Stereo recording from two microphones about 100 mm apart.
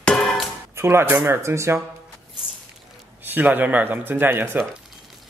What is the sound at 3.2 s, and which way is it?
Speech, 20° right (ahead or behind).